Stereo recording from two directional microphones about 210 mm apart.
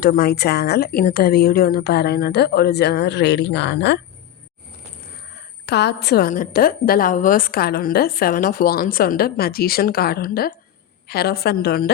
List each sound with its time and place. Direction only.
0.0 s a woman's voice: 45° left (ahead or behind)
5.6 s a woman's voice: 55° left (ahead or behind)